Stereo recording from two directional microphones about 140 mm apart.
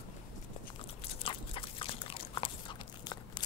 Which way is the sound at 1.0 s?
40° left (ahead or behind).